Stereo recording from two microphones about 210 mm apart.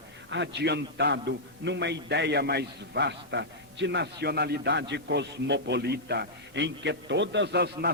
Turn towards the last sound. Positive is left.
turn(degrees=-50)  # may be behind; listen again after turning